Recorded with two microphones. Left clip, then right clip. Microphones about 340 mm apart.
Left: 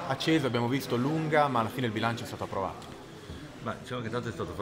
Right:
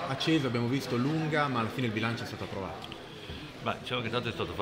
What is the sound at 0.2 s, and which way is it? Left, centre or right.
Speech, left.